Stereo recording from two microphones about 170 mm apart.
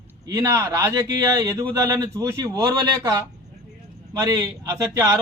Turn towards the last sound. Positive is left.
turn(degrees=-20)  # may be behind; listen again after turning